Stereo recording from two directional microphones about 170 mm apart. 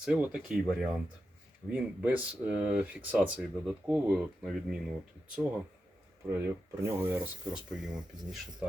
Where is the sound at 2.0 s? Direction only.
10° right (ahead or behind).